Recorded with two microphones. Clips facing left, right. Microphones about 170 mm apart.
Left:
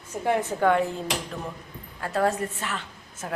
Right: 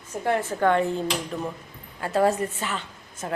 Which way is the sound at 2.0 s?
5° right (ahead or behind).